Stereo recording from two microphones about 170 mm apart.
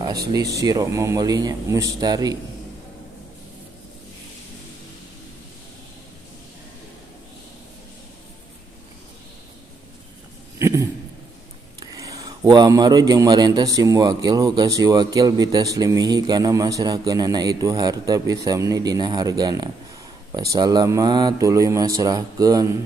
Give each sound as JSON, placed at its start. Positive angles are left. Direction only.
{"t": 0.3, "sound": "a man's voice", "side_deg": -20}
{"t": 10.6, "sound": "a sound", "side_deg": -20}
{"t": 11.8, "sound": "a man's voice", "side_deg": -20}